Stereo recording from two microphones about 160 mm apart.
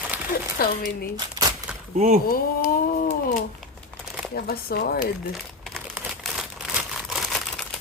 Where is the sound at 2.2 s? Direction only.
60° left (ahead or behind).